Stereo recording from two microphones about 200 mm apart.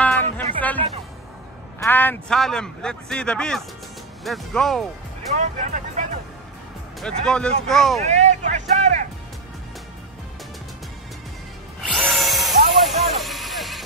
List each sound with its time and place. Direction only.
0.6 s music: 10° left (ahead or behind)
1.8 s speech: 10° left (ahead or behind)
5.4 s speech: 40° right (ahead or behind)
7.0 s speech: 5° left (ahead or behind)
8.0 s speech: 35° right (ahead or behind)
11.8 s a sound: centre (ahead or behind)